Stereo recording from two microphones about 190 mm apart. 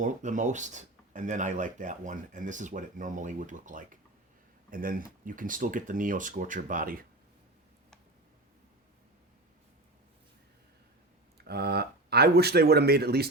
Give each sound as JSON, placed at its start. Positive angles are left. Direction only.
{"t": 0.0, "sound": "speech", "side_deg": -40}
{"t": 11.3, "sound": "speech", "side_deg": -60}